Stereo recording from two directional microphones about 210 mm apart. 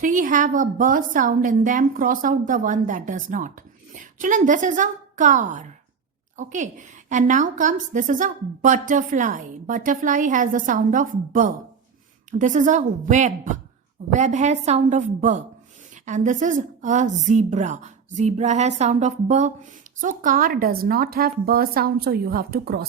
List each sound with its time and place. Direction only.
0.0 s a woman's voice: 40° right (ahead or behind)